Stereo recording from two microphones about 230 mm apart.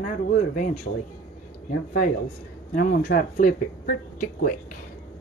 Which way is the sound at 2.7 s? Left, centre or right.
Left.